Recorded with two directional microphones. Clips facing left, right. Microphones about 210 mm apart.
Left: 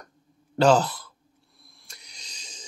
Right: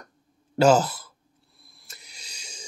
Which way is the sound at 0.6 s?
10° right (ahead or behind).